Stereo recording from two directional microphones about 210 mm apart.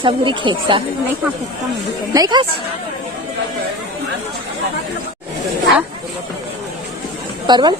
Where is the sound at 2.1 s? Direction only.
20° right (ahead or behind).